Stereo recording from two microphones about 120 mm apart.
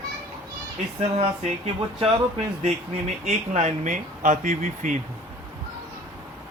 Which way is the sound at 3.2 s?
75° right (ahead or behind).